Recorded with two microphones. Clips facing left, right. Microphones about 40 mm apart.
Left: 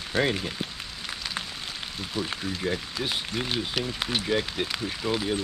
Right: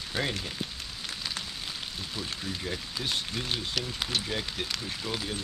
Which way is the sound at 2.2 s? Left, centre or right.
Left.